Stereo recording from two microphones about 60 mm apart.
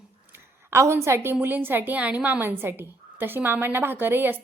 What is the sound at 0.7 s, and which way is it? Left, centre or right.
A woman's voice, right.